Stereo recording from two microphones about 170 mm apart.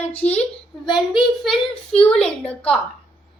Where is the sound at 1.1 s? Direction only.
Centre (ahead or behind).